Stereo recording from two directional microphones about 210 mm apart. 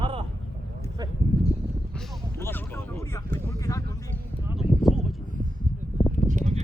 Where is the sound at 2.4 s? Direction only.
10° left (ahead or behind).